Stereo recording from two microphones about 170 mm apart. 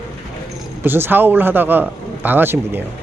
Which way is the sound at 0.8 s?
10° right (ahead or behind).